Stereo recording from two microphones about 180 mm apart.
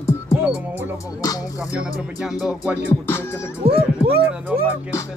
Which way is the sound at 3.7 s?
30° right (ahead or behind).